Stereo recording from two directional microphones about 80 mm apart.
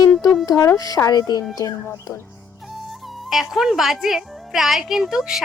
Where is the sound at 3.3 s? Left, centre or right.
Centre.